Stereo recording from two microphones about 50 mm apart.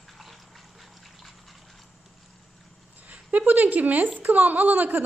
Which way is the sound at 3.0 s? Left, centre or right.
Right.